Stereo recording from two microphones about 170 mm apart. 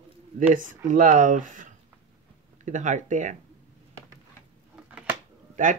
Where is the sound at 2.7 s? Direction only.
45° right (ahead or behind).